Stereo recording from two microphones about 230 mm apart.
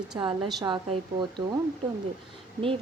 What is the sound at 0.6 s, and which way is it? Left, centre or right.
Speech, right.